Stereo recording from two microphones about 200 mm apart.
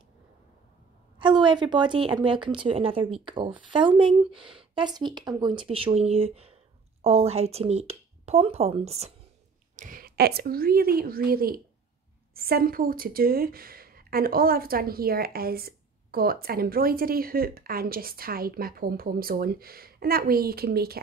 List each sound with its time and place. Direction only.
1.2 s speech: 25° right (ahead or behind)
9.8 s a woman's voice: 45° right (ahead or behind)